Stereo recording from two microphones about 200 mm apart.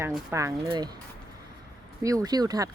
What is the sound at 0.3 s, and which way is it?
Speech, 15° right (ahead or behind).